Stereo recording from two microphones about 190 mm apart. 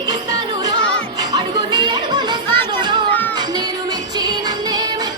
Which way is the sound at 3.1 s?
10° left (ahead or behind).